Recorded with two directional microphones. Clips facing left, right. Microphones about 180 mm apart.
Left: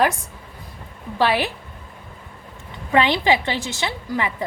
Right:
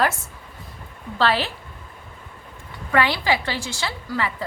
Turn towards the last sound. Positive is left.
turn(degrees=20)  # may be behind; listen again after turning